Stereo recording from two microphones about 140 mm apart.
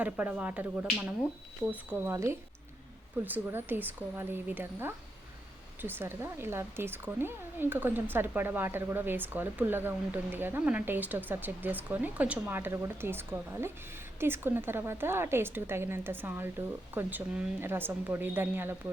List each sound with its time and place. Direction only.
0.0 s speech: 10° right (ahead or behind)